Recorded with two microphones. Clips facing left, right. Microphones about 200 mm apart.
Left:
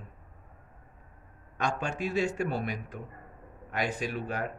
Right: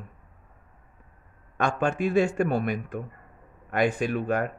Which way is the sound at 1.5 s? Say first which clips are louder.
Right 6 dB; 55° right (ahead or behind).